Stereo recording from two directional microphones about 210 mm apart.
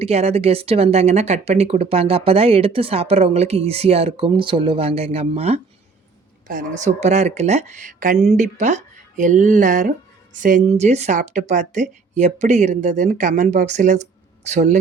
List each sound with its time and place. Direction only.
0.0 s speech: 30° right (ahead or behind)